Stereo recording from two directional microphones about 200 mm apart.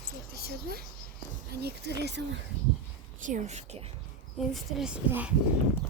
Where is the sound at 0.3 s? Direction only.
55° right (ahead or behind).